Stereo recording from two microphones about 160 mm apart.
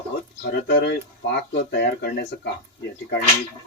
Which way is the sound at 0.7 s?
90° left.